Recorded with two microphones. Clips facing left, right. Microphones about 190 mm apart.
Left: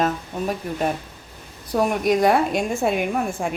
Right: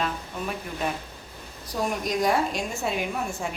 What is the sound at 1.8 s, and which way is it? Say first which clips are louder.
A woman's voice: left 7 dB; 60° left (ahead or behind).